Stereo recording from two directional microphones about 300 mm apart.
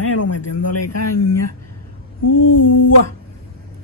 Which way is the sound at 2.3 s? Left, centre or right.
Left.